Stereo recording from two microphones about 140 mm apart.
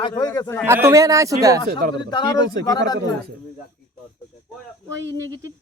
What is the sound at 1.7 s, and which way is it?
Speech, 80° right.